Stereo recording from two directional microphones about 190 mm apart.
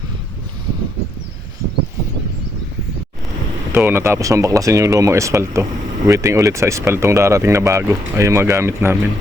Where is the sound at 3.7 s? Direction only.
10° right (ahead or behind).